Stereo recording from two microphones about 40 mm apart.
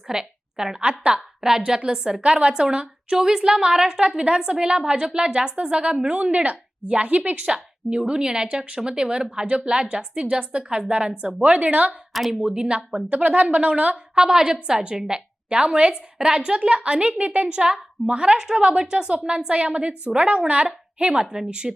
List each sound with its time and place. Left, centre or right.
0.1 s a woman's voice: centre
0.8 s a woman's voice: right
1.4 s a woman's voice: centre
11.4 s a woman's voice: right
11.9 s a woman's voice: centre
12.5 s a woman's voice: right
13.9 s a woman's voice: centre
21.2 s a woman's voice: centre